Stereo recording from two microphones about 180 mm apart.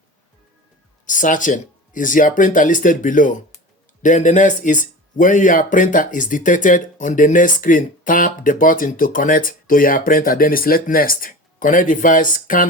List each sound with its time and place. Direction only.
1.0 s speech: 45° left (ahead or behind)